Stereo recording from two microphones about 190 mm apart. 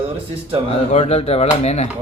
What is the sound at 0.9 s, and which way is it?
Speech, 35° left (ahead or behind).